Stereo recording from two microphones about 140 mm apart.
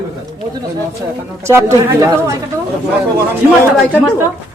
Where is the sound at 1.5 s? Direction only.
20° right (ahead or behind).